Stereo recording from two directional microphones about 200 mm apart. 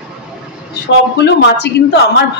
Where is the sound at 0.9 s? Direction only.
55° left (ahead or behind).